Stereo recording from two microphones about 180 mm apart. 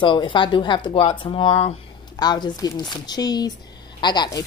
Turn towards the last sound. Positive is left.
turn(degrees=25)  # may be behind; listen again after turning